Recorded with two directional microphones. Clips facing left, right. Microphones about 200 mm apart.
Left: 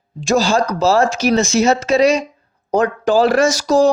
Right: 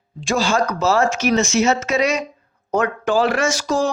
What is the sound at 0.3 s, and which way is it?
Speech, 40° left (ahead or behind).